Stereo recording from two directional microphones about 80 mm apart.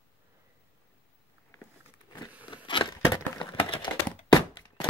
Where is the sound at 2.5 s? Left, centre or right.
Left.